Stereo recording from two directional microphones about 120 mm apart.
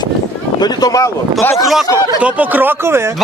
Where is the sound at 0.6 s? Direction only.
30° left (ahead or behind).